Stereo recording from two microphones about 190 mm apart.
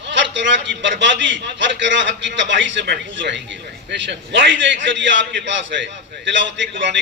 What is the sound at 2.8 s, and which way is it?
A man's voice, 60° right (ahead or behind).